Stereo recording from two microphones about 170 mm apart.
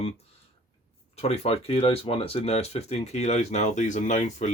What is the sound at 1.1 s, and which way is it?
Speech, 40° left (ahead or behind).